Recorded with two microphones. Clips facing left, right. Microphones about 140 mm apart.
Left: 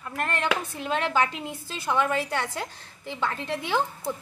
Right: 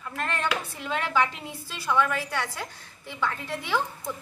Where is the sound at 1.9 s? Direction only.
25° left (ahead or behind).